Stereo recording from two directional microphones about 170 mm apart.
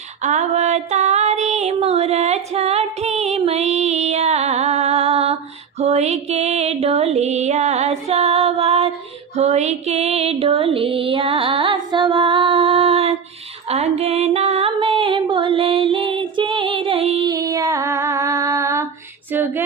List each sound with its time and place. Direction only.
0.2 s a sound: 45° right (ahead or behind)
5.8 s music: 40° right (ahead or behind)
17.3 s female singing: 20° right (ahead or behind)